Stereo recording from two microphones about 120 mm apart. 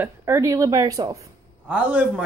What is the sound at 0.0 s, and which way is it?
Speech, 25° right (ahead or behind).